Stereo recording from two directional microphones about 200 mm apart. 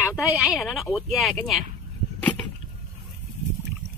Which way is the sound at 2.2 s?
5° left (ahead or behind).